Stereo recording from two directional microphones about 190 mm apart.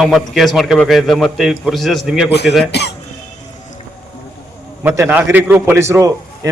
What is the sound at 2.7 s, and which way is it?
Cough, 60° left (ahead or behind).